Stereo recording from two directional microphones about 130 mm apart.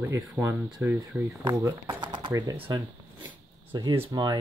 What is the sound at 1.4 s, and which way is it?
Speech, 30° right (ahead or behind).